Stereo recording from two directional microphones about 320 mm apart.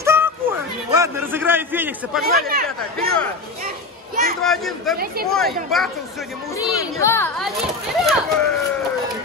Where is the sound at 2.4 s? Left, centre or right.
Right.